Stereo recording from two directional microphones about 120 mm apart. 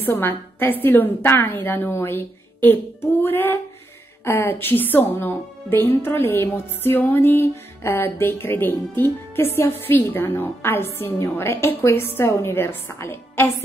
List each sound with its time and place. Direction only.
0.0 s a woman's voice: 20° left (ahead or behind)